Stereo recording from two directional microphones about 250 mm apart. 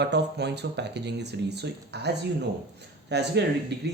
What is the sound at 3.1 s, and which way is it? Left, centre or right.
Speech, right.